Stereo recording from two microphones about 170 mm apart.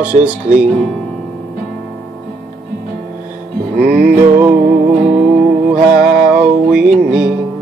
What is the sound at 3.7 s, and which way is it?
Music, 60° right (ahead or behind).